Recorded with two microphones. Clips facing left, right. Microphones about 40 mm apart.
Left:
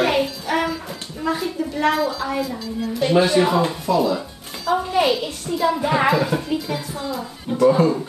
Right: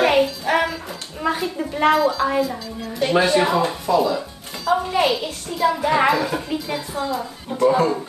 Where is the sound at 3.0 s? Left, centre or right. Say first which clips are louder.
Even; centre.